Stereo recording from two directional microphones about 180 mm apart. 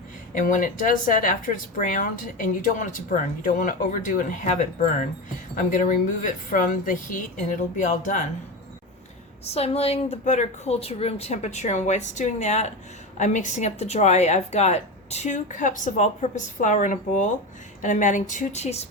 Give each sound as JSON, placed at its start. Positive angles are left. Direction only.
{"t": 0.3, "sound": "speech", "side_deg": 45}
{"t": 9.4, "sound": "speech", "side_deg": 35}